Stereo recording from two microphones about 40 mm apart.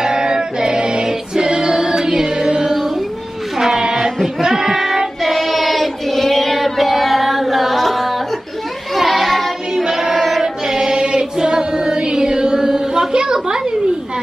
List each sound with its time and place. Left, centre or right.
0.0 s female singing: centre
3.5 s a sound: centre
3.9 s child singing: centre